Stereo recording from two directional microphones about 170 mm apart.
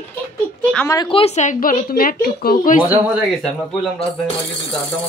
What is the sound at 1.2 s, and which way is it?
A woman's voice, 40° left (ahead or behind).